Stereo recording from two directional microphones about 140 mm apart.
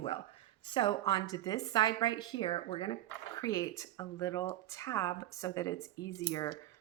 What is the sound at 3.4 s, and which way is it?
Speech, 25° left (ahead or behind).